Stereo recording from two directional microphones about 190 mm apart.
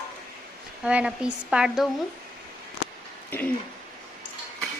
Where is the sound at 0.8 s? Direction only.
5° right (ahead or behind).